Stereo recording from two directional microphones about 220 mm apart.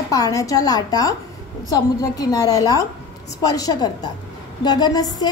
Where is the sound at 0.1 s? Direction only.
15° left (ahead or behind).